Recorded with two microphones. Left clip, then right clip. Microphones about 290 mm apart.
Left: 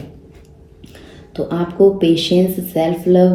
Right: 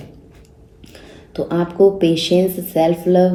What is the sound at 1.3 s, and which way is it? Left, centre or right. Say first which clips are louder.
Speech: even; right.